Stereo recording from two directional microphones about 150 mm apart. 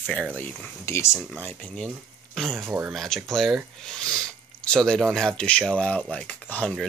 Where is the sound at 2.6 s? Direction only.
10° right (ahead or behind).